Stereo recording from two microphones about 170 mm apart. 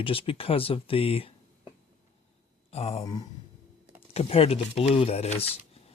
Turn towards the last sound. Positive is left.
turn(degrees=35)  # may be behind; listen again after turning